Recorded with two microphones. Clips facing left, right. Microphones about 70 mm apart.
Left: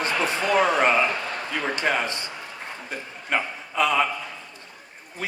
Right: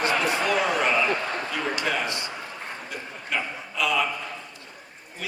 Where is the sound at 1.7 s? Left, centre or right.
Left.